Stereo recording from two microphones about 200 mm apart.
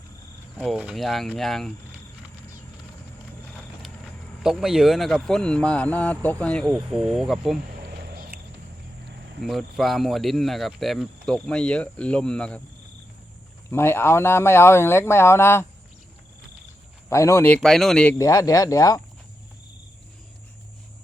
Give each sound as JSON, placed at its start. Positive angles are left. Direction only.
{"t": 0.5, "sound": "speech", "side_deg": -5}
{"t": 4.4, "sound": "speech", "side_deg": 0}
{"t": 8.0, "sound": "a sound", "side_deg": -50}
{"t": 9.4, "sound": "speech", "side_deg": 0}
{"t": 13.7, "sound": "speech", "side_deg": 10}
{"t": 17.1, "sound": "speech", "side_deg": 15}